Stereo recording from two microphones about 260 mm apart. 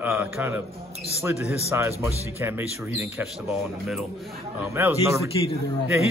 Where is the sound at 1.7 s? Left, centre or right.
Centre.